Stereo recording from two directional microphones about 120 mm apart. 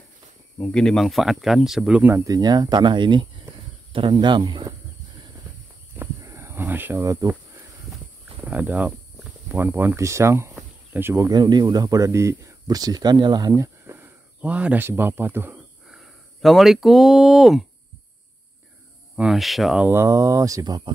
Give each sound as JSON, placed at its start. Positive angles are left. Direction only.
{"t": 0.6, "sound": "speech", "side_deg": 5}
{"t": 2.1, "sound": "speech", "side_deg": -30}
{"t": 6.2, "sound": "cricket", "side_deg": -20}
{"t": 8.4, "sound": "speech", "side_deg": -15}
{"t": 15.9, "sound": "speech", "side_deg": 0}
{"t": 19.1, "sound": "speech", "side_deg": -5}
{"t": 19.9, "sound": "speech", "side_deg": -25}